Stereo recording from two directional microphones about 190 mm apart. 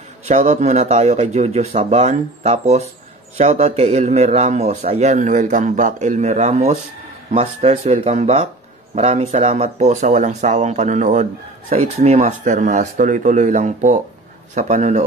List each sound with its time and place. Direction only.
0.3 s a man's voice: 40° right (ahead or behind)